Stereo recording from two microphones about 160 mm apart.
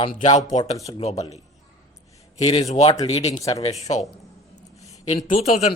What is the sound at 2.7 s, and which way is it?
Speech, 45° left (ahead or behind).